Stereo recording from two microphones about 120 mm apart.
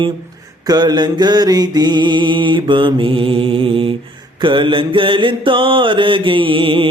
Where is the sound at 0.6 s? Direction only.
35° right (ahead or behind).